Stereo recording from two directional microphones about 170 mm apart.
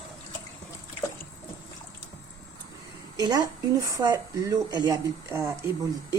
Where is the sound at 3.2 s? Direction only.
20° right (ahead or behind).